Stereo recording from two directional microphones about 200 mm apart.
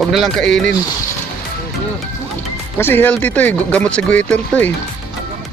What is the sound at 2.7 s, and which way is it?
Speech, 10° left (ahead or behind).